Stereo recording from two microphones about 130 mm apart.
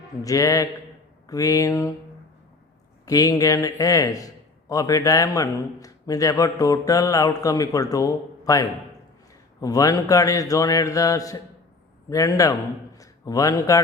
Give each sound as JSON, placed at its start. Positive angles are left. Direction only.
{"t": 0.2, "sound": "a man's voice", "side_deg": 25}
{"t": 3.1, "sound": "a man's voice", "side_deg": 30}